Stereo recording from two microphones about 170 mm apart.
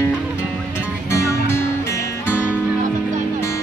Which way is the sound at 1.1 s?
15° left (ahead or behind).